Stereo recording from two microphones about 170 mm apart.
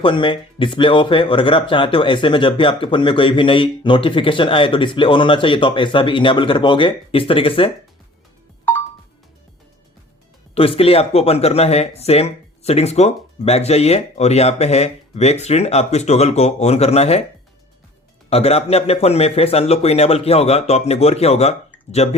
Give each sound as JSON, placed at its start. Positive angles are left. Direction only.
{"t": 0.0, "sound": "speech", "side_deg": 30}
{"t": 10.5, "sound": "speech", "side_deg": 35}
{"t": 18.3, "sound": "speech", "side_deg": 35}